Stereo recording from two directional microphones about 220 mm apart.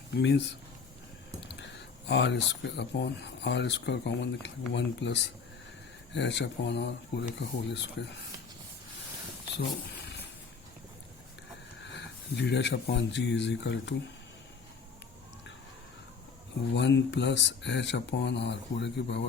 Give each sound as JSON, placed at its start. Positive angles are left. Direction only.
{"t": 0.2, "sound": "speech", "side_deg": 50}
{"t": 2.0, "sound": "speech", "side_deg": 50}
{"t": 11.9, "sound": "speech", "side_deg": 50}
{"t": 16.7, "sound": "speech", "side_deg": 55}